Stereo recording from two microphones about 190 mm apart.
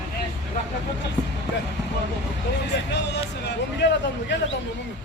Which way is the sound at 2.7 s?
65° left (ahead or behind).